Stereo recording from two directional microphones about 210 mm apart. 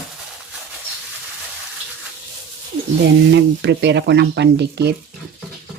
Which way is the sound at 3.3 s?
55° right (ahead or behind).